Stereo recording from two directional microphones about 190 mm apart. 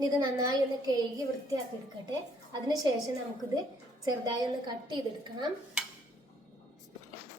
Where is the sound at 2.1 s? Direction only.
20° right (ahead or behind).